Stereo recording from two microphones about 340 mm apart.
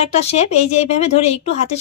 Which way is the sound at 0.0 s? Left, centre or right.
Centre.